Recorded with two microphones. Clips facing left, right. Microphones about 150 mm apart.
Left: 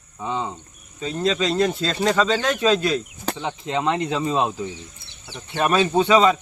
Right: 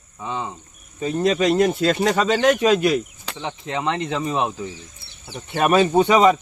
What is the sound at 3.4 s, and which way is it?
Speech, 15° left (ahead or behind).